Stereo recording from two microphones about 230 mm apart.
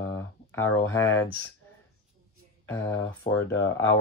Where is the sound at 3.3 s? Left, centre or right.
Left.